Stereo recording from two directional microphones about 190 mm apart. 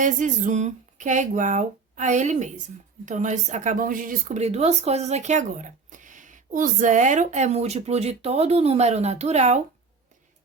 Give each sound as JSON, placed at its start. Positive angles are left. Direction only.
{"t": 0.0, "sound": "a woman's voice", "side_deg": -40}